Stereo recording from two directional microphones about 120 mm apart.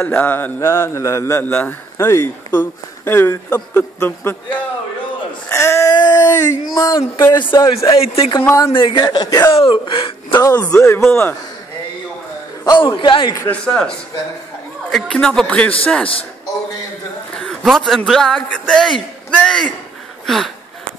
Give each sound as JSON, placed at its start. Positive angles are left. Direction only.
{"t": 0.0, "sound": "a man's voice", "side_deg": 15}
{"t": 5.5, "sound": "a sound", "side_deg": 25}
{"t": 6.2, "sound": "a man's voice", "side_deg": 25}
{"t": 7.3, "sound": "a man's voice", "side_deg": 35}
{"t": 7.9, "sound": "a man's voice", "side_deg": 55}
{"t": 9.5, "sound": "speech", "side_deg": 45}
{"t": 10.3, "sound": "a man's voice", "side_deg": 30}
{"t": 10.6, "sound": "a man's voice", "side_deg": 15}
{"t": 12.6, "sound": "a man's voice", "side_deg": 40}
{"t": 13.5, "sound": "speech", "side_deg": 10}
{"t": 17.4, "sound": "a man's voice", "side_deg": 5}
{"t": 20.2, "sound": "a sound", "side_deg": 0}